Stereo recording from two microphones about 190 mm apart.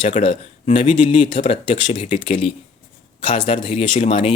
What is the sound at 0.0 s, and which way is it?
A man's voice, 35° left (ahead or behind).